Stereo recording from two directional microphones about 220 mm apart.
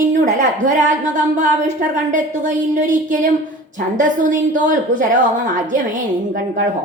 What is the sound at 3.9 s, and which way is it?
A woman's voice, 35° right (ahead or behind).